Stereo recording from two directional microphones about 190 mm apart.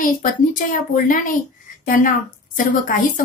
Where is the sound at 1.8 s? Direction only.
45° left (ahead or behind).